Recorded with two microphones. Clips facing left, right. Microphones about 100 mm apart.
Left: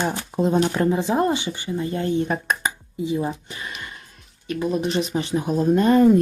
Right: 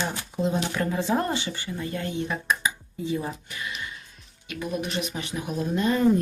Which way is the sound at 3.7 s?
50° left (ahead or behind).